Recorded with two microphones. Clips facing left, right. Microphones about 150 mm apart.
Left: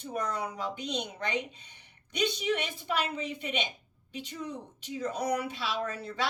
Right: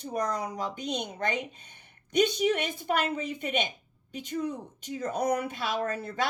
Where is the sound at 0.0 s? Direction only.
40° right (ahead or behind).